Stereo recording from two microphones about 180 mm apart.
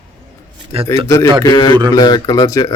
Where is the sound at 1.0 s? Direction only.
15° left (ahead or behind).